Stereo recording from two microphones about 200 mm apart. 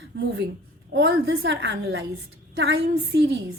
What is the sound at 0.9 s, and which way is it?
Speech, 55° right (ahead or behind).